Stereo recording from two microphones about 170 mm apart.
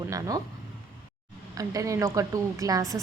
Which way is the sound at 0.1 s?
20° right (ahead or behind).